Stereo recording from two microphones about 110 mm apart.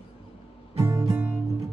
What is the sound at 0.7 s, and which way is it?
Music, 30° right (ahead or behind).